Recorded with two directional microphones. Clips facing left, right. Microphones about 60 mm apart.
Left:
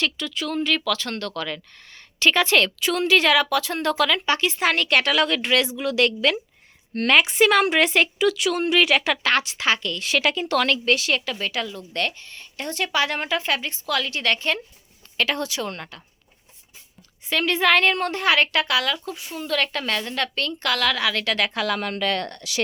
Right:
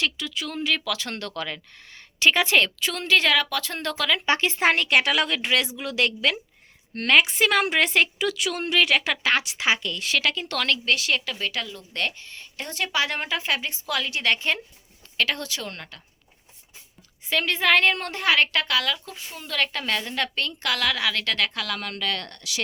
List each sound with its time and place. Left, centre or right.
0.0 s speech: centre
0.9 s speech: centre
2.7 s speech: centre
4.3 s speech: right
4.8 s a woman's voice: centre
10.2 s speech: centre
15.2 s a woman's voice: centre
17.2 s speech: centre
21.5 s speech: left